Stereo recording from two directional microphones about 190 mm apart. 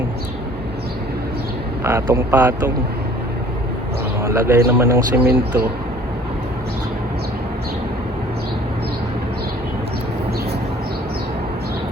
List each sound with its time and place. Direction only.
1.8 s speech: 15° right (ahead or behind)
4.2 s speech: 15° right (ahead or behind)
5.2 s speech: 55° right (ahead or behind)